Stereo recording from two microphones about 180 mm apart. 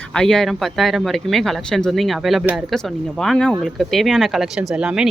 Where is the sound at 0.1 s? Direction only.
5° left (ahead or behind).